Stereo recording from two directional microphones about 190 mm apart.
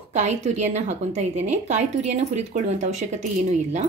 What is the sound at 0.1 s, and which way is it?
A woman's voice, 35° right (ahead or behind).